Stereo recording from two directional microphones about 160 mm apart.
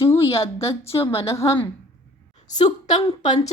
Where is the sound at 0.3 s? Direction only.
35° left (ahead or behind).